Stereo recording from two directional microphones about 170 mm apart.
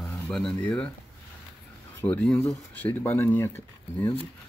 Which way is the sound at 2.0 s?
10° left (ahead or behind).